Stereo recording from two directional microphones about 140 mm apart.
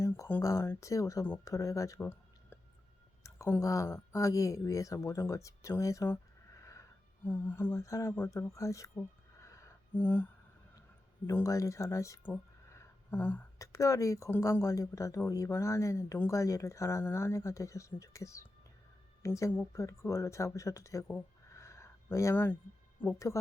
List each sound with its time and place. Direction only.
0.0 s speech: 15° left (ahead or behind)
7.3 s music: 15° left (ahead or behind)
8.5 s speech: 20° left (ahead or behind)
9.0 s a sound: 20° left (ahead or behind)
11.3 s speech: 20° left (ahead or behind)